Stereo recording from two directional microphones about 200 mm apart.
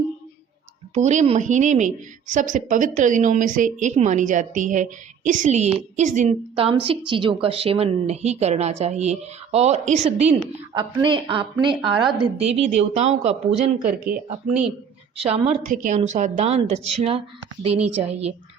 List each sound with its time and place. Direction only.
0.9 s a woman's voice: 35° right (ahead or behind)
15.2 s a woman's voice: 35° right (ahead or behind)